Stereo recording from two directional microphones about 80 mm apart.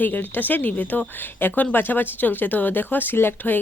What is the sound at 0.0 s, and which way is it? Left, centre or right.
Speech, left.